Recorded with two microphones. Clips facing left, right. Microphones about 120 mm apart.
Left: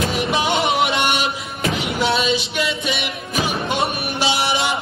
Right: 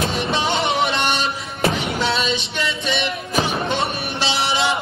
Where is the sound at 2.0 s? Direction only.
10° left (ahead or behind).